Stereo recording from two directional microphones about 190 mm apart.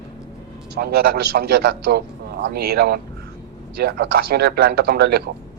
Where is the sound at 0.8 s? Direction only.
55° right (ahead or behind).